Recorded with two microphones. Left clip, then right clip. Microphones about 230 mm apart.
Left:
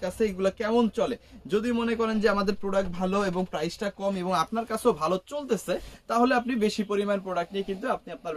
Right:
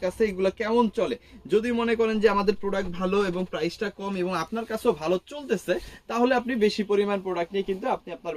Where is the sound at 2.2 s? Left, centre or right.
Left.